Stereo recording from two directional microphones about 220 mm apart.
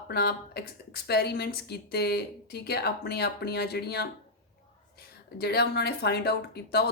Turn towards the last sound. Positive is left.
turn(degrees=45)  # may be behind; listen again after turning